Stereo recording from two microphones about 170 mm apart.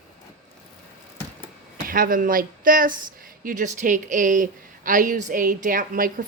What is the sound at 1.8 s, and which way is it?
A woman's voice, 55° right (ahead or behind).